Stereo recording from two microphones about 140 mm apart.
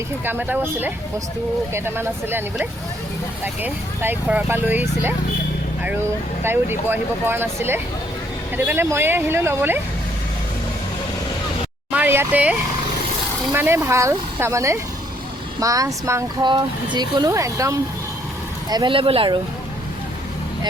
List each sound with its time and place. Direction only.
0.3 s speech: 15° right (ahead or behind)
3.4 s speech: 15° right (ahead or behind)
6.4 s speech: 15° right (ahead or behind)
11.9 s speech: 15° right (ahead or behind)
16.4 s speech: 35° right (ahead or behind)
18.7 s speech: 35° right (ahead or behind)